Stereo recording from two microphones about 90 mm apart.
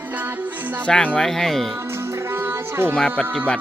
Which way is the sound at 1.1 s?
5° left (ahead or behind).